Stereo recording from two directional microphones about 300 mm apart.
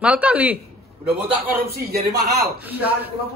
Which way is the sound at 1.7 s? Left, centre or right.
Right.